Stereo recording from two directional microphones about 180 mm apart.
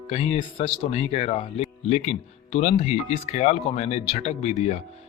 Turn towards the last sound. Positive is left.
turn(degrees=35)  # may be behind; listen again after turning